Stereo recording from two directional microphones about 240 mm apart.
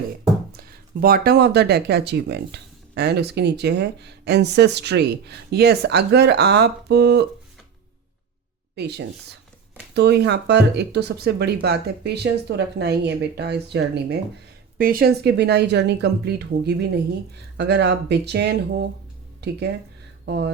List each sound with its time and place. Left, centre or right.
0.5 s speech: right
8.7 s speech: right